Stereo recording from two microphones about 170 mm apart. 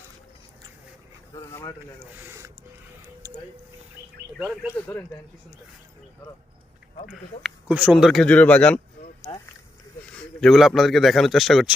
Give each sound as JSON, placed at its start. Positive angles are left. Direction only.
{"t": 1.4, "sound": "a sound", "side_deg": 15}
{"t": 2.1, "sound": "speech", "side_deg": -15}
{"t": 4.4, "sound": "speech", "side_deg": -5}
{"t": 4.7, "sound": "speech", "side_deg": 15}
{"t": 7.1, "sound": "speech", "side_deg": -5}
{"t": 10.1, "sound": "speech", "side_deg": 0}